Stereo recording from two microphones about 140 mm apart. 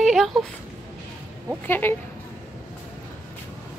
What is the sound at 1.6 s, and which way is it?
Speech, 15° left (ahead or behind).